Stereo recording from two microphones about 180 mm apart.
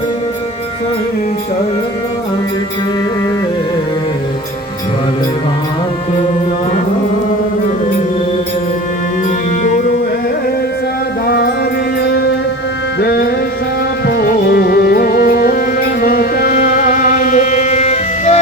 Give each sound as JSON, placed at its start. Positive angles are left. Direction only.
{"t": 11.3, "sound": "music", "side_deg": 60}
{"t": 12.0, "sound": "music", "side_deg": 75}
{"t": 13.0, "sound": "music", "side_deg": 60}